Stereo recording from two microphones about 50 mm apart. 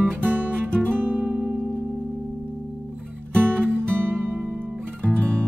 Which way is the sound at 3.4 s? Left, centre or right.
Right.